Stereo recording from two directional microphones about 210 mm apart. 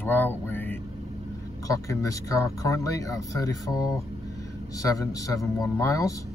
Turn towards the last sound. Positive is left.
turn(degrees=15)  # may be behind; listen again after turning